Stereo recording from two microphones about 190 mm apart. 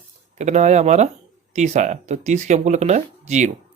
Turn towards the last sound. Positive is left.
turn(degrees=-40)  # may be behind; listen again after turning